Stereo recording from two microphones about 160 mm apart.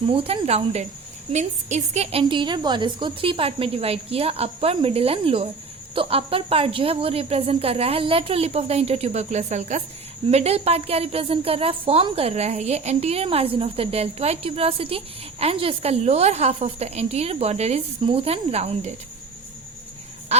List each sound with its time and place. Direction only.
0.1 s a woman's voice: 35° right (ahead or behind)